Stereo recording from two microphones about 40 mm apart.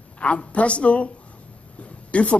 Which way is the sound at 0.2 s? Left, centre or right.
Left.